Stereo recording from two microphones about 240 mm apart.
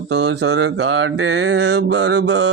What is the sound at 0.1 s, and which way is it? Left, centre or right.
Mantra, right.